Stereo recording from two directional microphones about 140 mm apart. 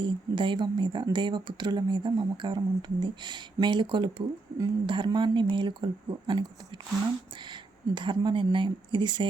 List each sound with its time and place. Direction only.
0.0 s speech: 35° right (ahead or behind)
7.5 s speech: 35° right (ahead or behind)